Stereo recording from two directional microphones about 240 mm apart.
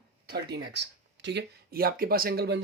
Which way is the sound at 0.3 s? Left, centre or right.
Right.